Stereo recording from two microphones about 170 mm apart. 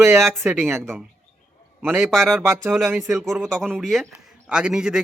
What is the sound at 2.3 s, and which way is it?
Speech, 15° right (ahead or behind).